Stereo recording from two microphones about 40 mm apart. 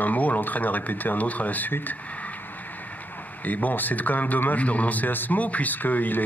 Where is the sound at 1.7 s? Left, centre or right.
Left.